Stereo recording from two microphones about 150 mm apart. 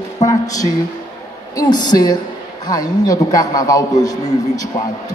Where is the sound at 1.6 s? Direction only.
30° left (ahead or behind).